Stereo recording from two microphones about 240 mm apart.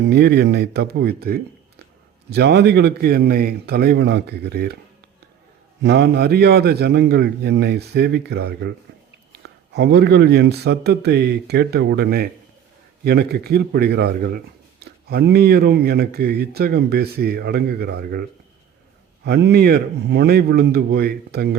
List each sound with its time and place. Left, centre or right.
0.0 s speech: right
5.8 s speech: right